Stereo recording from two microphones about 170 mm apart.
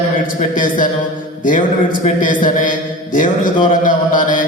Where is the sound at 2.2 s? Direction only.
50° left (ahead or behind).